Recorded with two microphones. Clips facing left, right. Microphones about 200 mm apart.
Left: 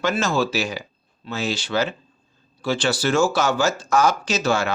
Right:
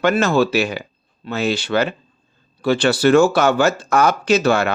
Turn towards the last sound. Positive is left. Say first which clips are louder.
# right 6 dB
turn(degrees=-60)  # may be behind; listen again after turning